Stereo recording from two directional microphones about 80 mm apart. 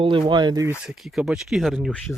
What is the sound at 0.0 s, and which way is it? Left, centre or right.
Speech, right.